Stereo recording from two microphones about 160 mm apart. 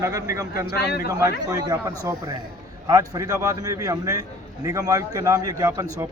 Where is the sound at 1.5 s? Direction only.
25° right (ahead or behind).